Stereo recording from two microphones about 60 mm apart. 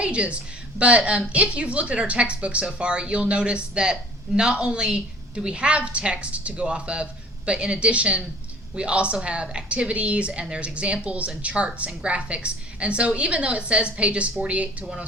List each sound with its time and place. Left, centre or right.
0.0 s a woman's voice: centre